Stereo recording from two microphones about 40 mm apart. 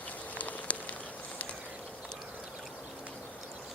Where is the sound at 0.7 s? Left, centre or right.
Left.